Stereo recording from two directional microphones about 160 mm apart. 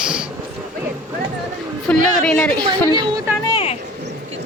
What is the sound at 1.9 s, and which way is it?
Speech, 5° left (ahead or behind).